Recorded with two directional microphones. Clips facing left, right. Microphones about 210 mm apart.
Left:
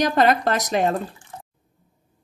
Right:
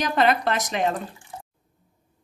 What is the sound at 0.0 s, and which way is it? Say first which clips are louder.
Speech: left 3 dB; 40° left (ahead or behind).